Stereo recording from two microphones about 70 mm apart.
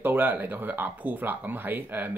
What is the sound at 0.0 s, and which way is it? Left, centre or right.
Speech, right.